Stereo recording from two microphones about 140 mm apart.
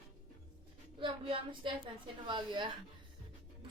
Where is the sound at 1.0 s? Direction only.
40° right (ahead or behind).